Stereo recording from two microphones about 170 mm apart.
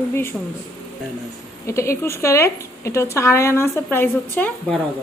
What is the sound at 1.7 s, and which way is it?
Speech, 15° left (ahead or behind).